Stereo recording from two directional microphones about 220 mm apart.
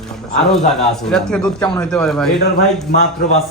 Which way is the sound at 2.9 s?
30° left (ahead or behind).